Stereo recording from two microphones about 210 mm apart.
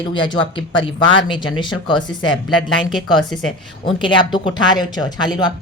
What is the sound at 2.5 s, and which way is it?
Speech, centre (ahead or behind).